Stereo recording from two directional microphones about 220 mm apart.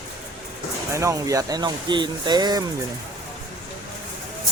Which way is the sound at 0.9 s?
15° right (ahead or behind).